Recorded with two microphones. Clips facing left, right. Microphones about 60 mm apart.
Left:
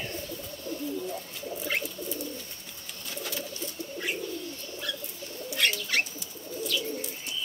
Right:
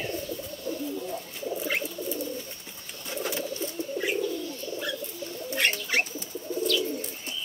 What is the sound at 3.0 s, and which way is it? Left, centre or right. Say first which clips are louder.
Bird: right 5 dB; right.